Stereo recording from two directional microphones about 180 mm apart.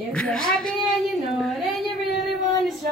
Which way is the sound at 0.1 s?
5° left (ahead or behind).